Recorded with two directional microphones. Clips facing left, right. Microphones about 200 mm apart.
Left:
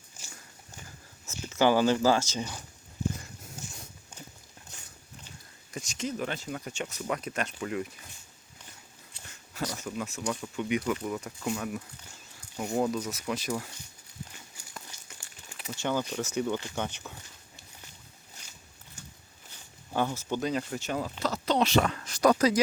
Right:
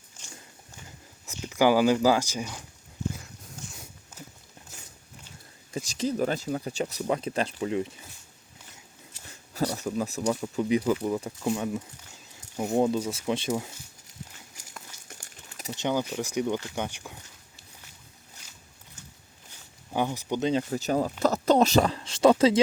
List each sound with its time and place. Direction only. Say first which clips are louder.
0.2 s biting: right 2 dB; 5° left (ahead or behind)
1.2 s speech: right 2 dB; 15° right (ahead or behind)
3.1 s a sound: even; centre (ahead or behind)
5.7 s speech: right 6 dB; 35° right (ahead or behind)
9.6 s speech: right 6 dB; 35° right (ahead or behind)
15.7 s speech: right 2 dB; 15° right (ahead or behind)
19.9 s speech: right 2 dB; 15° right (ahead or behind)
20.7 s speech: right 6 dB; 40° right (ahead or behind)